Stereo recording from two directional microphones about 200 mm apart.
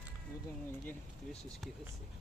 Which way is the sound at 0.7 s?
5° left (ahead or behind).